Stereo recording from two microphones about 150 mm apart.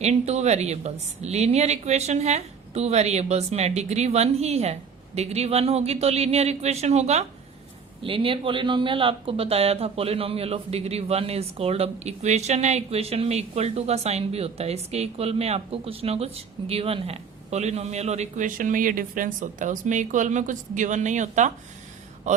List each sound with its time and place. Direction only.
0.0 s speech: 45° right (ahead or behind)
8.0 s speech: 35° right (ahead or behind); by 21.5 s 55° right (ahead or behind)